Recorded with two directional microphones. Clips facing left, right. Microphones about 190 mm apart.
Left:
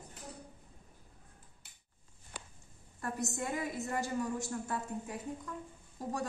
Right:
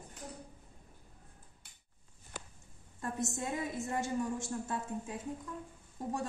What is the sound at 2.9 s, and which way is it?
A woman's voice, 25° right (ahead or behind).